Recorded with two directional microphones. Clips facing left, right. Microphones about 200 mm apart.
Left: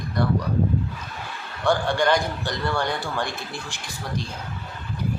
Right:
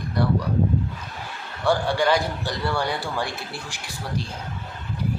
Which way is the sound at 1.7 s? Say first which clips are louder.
Even; 5° right (ahead or behind).